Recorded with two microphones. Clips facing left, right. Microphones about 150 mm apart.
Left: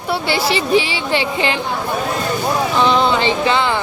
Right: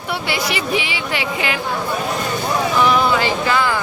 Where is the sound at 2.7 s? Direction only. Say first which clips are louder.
Left 1 dB; 25° left (ahead or behind).